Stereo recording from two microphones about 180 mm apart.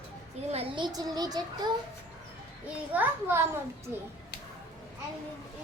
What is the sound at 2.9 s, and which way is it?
Speech, 10° right (ahead or behind).